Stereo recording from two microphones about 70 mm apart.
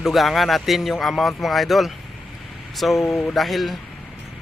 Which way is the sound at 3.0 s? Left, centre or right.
Centre.